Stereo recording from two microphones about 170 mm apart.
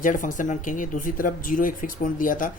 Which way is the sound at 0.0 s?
50° left (ahead or behind).